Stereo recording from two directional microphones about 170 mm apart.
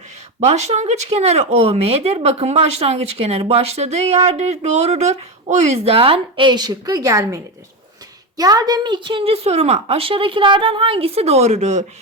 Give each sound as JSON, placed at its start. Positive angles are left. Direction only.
{"t": 0.3, "sound": "speech", "side_deg": -40}